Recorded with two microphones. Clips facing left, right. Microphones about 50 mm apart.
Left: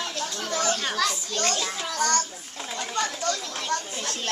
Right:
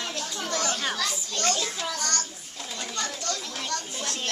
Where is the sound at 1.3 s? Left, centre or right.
Left.